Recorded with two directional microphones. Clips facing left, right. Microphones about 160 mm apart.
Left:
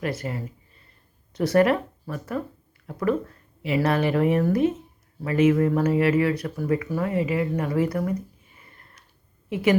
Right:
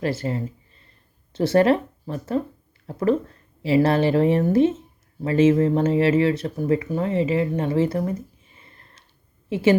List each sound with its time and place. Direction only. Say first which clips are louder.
0.0 s speech: right 4 dB; 30° right (ahead or behind)